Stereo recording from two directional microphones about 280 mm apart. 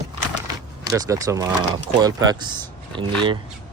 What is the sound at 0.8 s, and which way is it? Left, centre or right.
Speech, centre.